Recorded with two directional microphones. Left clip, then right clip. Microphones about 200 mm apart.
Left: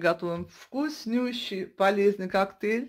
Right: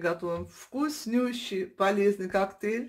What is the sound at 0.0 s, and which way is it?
Speech, 45° left (ahead or behind).